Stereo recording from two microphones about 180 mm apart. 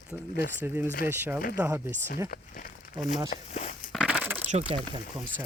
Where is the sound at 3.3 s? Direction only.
40° left (ahead or behind).